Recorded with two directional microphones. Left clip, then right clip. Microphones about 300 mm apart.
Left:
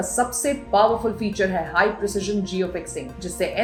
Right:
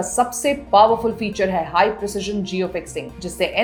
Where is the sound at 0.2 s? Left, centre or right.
Centre.